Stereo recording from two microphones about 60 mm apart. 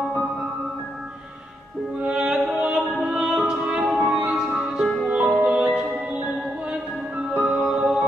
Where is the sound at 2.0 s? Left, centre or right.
Centre.